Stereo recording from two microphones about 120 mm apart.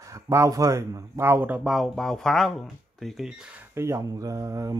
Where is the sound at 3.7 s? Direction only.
25° right (ahead or behind).